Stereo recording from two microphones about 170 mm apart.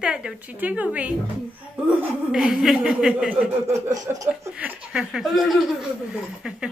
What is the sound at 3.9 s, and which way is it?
Speech, 20° right (ahead or behind).